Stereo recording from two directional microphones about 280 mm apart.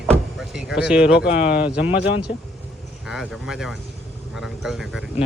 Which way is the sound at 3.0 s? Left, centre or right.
Centre.